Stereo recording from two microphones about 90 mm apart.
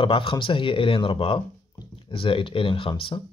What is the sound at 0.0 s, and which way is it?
Speech, 80° left.